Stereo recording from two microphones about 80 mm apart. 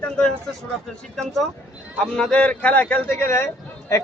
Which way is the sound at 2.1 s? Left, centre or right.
Centre.